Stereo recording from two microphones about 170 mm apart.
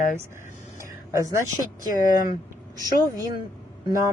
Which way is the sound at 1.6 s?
50° left (ahead or behind).